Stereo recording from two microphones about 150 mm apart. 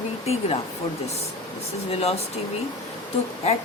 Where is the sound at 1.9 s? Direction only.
45° left (ahead or behind).